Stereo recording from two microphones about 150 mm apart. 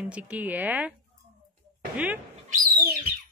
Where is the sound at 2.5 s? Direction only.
90° right.